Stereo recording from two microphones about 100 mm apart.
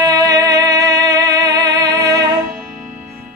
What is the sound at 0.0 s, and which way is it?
Music, 35° right (ahead or behind).